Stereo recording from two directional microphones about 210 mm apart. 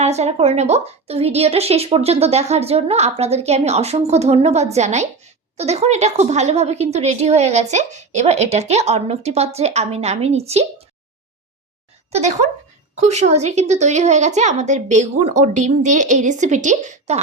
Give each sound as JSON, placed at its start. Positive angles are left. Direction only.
{"t": 0.0, "sound": "a woman's voice", "side_deg": -30}
{"t": 13.0, "sound": "a woman's voice", "side_deg": -35}